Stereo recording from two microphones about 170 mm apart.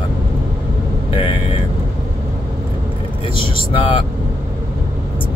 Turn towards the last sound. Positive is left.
turn(degrees=30)  # may be behind; listen again after turning